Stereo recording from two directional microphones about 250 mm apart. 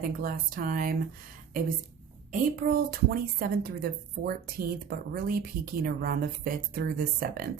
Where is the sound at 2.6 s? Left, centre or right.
Right.